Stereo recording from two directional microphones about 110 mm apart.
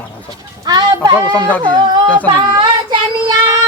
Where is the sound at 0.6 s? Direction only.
40° right (ahead or behind).